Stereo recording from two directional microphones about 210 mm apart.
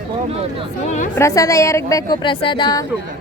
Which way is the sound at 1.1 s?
15° left (ahead or behind).